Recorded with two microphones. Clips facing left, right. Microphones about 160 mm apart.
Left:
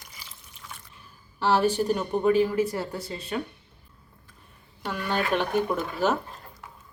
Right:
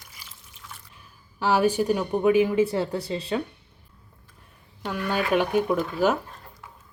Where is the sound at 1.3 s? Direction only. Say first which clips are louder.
Right 1 dB; 10° right (ahead or behind); by 3.4 s 30° right (ahead or behind).